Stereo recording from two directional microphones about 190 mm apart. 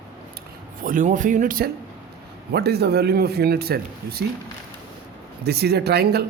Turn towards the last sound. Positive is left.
turn(degrees=-60)  # may be behind; listen again after turning